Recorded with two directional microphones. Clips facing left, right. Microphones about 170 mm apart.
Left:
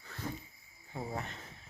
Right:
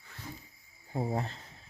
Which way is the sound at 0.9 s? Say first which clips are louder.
Right 7 dB; 35° right (ahead or behind).